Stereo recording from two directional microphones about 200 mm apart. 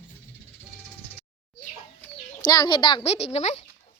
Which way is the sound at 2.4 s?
20° left (ahead or behind).